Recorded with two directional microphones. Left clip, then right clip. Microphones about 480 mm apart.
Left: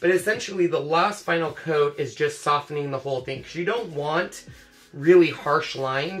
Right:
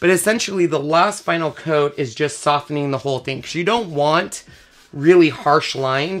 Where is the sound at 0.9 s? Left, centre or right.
Right.